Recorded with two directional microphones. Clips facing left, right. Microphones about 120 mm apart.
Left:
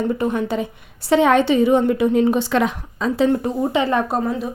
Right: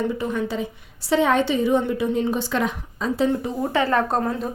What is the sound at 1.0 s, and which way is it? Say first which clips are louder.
A woman's voice: left 4 dB; 65° left (ahead or behind).